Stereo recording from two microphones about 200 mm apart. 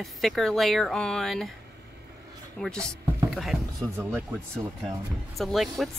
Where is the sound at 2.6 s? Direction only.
5° left (ahead or behind).